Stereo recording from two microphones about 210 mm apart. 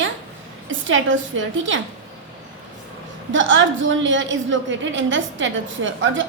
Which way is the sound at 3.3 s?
60° right (ahead or behind).